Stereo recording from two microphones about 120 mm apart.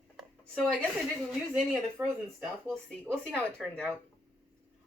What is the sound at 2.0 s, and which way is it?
Speech, 15° right (ahead or behind).